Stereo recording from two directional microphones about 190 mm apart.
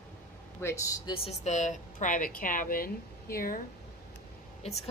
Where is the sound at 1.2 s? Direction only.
35° left (ahead or behind).